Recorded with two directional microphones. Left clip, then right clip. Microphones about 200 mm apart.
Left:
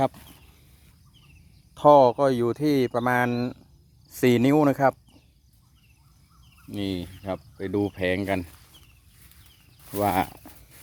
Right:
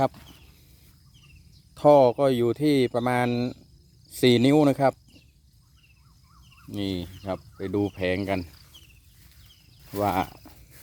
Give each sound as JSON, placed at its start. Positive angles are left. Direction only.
{"t": 0.1, "sound": "speech", "side_deg": 20}
{"t": 1.7, "sound": "speech", "side_deg": 0}
{"t": 6.7, "sound": "speech", "side_deg": 0}
{"t": 9.9, "sound": "a sound", "side_deg": 10}